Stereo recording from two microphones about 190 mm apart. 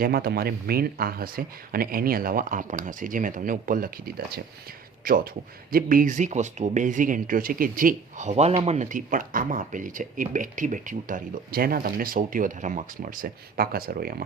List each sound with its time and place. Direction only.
0.0 s speech: 55° right (ahead or behind)